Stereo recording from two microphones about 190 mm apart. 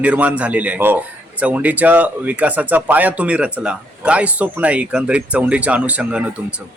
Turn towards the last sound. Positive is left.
turn(degrees=-5)  # may be behind; listen again after turning